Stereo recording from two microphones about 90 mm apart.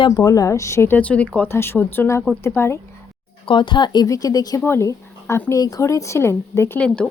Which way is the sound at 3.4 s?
65° left (ahead or behind).